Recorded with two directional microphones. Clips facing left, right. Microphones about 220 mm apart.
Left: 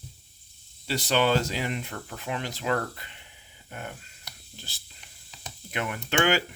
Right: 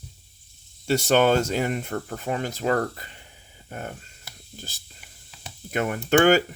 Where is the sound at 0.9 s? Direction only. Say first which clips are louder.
Right 5 dB; 45° right (ahead or behind).